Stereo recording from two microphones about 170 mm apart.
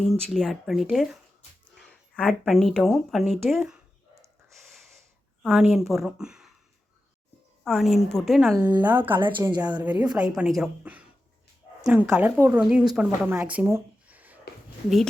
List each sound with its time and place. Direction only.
0.0 s speech: centre (ahead or behind)
4.1 s gasp: 15° right (ahead or behind)
5.4 s speech: centre (ahead or behind)
7.6 s speech: centre (ahead or behind)
8.8 s speech: 10° right (ahead or behind)
9.2 s a woman's voice: 25° right (ahead or behind)
9.8 s speech: 10° right (ahead or behind)
13.3 s a sound: 10° right (ahead or behind)